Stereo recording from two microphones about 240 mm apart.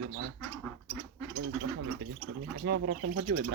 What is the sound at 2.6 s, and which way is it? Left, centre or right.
Speech, right.